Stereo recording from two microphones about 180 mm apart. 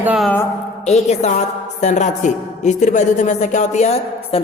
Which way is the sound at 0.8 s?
40° left (ahead or behind).